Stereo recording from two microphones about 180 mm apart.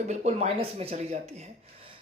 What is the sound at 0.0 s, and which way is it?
A woman's voice, 40° right (ahead or behind).